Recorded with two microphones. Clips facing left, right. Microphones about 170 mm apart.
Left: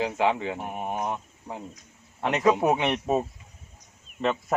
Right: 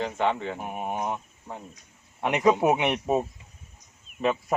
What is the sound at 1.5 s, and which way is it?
Speech, 15° left (ahead or behind).